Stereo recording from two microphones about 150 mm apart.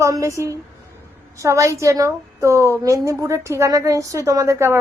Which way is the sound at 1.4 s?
20° right (ahead or behind).